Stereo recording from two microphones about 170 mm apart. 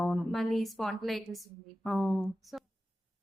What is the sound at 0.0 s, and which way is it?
A woman's voice, centre (ahead or behind).